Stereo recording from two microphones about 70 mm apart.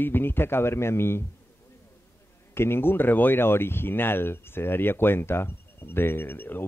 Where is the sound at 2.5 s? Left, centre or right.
Left.